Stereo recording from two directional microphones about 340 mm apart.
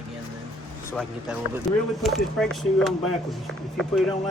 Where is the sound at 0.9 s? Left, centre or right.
Centre.